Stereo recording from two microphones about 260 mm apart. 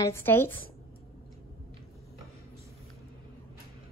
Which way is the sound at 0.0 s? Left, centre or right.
Centre.